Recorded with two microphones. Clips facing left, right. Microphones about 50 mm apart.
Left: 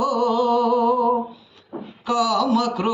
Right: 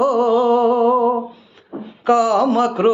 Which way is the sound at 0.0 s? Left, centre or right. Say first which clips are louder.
Right 5 dB; right.